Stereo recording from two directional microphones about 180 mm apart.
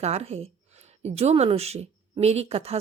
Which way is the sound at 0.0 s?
35° right (ahead or behind).